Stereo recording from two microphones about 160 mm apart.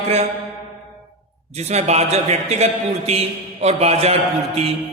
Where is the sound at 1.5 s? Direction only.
45° right (ahead or behind).